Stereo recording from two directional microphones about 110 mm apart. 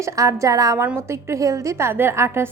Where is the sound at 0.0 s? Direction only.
30° right (ahead or behind).